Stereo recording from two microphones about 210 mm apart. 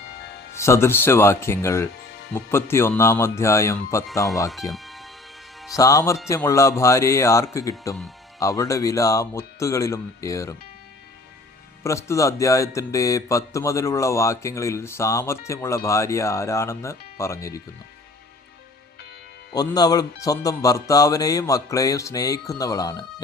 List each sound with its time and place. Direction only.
0.6 s speech: 10° left (ahead or behind)
4.7 s music: centre (ahead or behind)
5.7 s speech: 15° left (ahead or behind)
11.8 s speech: 15° left (ahead or behind)
19.5 s speech: 20° left (ahead or behind)